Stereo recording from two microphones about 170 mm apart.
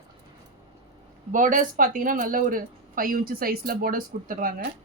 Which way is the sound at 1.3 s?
50° right (ahead or behind).